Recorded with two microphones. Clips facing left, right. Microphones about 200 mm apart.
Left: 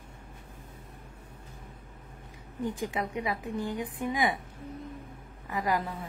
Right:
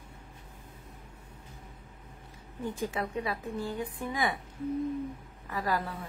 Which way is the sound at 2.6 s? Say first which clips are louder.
Left 1 dB; 15° left (ahead or behind).